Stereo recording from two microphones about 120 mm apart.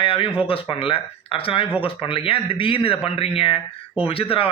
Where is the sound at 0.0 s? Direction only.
45° left (ahead or behind).